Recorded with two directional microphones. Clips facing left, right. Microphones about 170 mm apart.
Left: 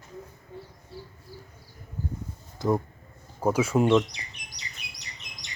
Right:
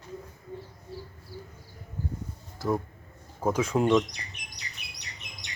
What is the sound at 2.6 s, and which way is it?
Speech, 20° left (ahead or behind).